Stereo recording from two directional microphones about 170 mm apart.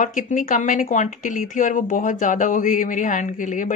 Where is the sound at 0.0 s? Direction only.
50° left (ahead or behind).